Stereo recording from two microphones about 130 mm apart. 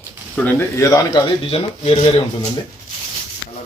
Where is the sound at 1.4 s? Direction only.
45° left (ahead or behind).